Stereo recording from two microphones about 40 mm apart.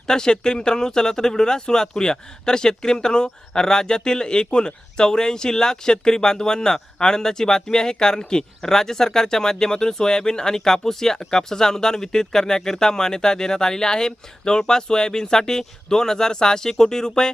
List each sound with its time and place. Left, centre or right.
0.1 s speech: centre